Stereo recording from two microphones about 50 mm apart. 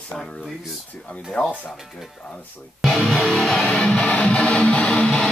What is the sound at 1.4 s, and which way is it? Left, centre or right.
Speech, left.